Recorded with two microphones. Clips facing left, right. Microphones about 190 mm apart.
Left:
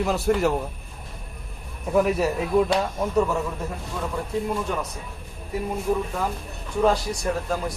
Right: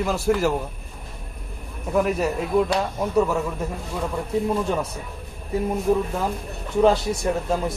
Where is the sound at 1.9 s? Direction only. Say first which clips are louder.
Left 1 dB; centre (ahead or behind).